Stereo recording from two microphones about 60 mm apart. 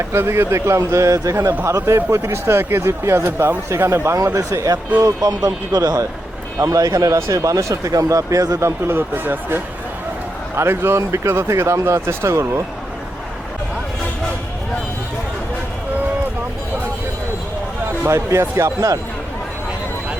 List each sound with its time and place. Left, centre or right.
0.0 s speech: right
3.2 s speech: right
3.7 s speech: right
4.5 s speech: right
6.6 s speech: right
18.0 s speech: right